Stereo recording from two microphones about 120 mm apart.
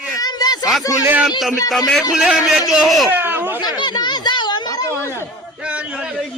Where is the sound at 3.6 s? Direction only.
35° left (ahead or behind).